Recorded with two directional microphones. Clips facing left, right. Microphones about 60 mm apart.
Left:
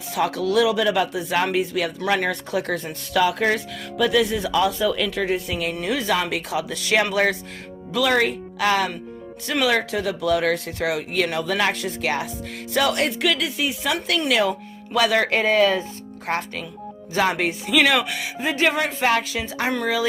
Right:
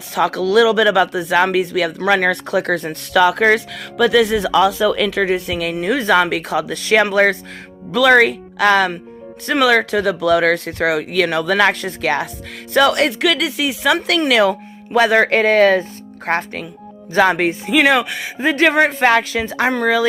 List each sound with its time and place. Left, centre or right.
0.1 s speech: right
5.1 s speech: right
5.8 s speech: right
6.8 s speech: right
7.9 s speech: right
11.7 s speech: right
14.9 s speech: right
16.2 s speech: right
18.4 s speech: right